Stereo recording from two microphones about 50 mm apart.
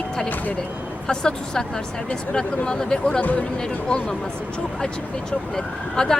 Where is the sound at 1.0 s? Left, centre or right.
Centre.